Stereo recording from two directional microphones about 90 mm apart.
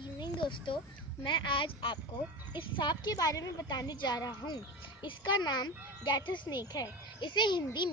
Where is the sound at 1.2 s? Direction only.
65° left (ahead or behind).